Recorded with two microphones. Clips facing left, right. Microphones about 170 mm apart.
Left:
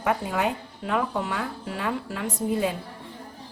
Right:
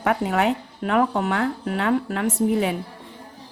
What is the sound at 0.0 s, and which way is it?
Speech, 65° right (ahead or behind).